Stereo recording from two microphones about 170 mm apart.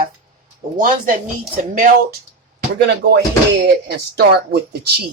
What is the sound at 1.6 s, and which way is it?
Speech, 55° right (ahead or behind).